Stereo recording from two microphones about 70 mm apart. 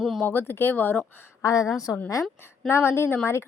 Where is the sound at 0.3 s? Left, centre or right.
Left.